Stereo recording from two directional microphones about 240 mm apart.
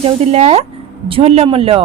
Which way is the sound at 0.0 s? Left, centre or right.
Right.